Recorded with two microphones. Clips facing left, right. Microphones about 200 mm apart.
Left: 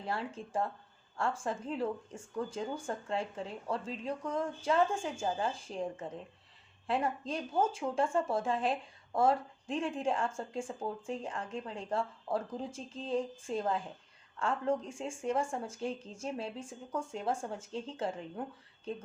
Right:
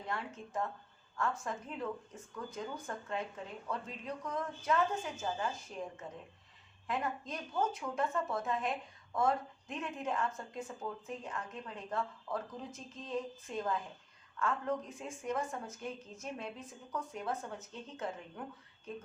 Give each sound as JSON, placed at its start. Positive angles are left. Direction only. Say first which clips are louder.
{"t": 0.0, "sound": "speech", "louder": "left 4 dB", "side_deg": 30}